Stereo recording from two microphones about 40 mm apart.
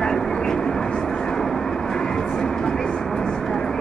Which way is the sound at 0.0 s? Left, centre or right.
Centre.